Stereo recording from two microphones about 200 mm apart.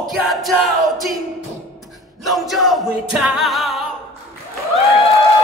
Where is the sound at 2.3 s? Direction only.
Centre (ahead or behind).